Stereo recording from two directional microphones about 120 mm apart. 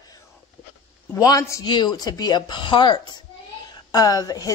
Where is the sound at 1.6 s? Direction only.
40° left (ahead or behind).